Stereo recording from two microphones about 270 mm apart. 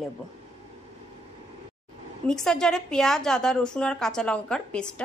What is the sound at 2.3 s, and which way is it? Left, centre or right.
A woman's voice, centre.